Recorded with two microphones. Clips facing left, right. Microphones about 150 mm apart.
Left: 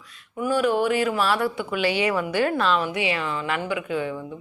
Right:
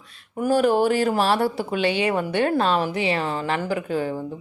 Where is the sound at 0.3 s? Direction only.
40° right (ahead or behind).